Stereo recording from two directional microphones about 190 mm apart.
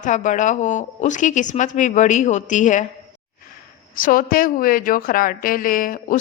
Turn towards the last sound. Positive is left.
turn(degrees=45)  # may be behind; listen again after turning